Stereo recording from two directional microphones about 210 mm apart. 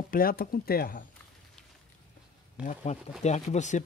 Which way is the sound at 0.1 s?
45° left (ahead or behind).